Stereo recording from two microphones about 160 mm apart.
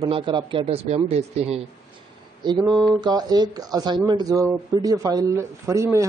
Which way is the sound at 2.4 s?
30° right (ahead or behind).